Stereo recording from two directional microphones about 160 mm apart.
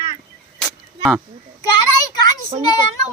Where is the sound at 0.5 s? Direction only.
Centre (ahead or behind).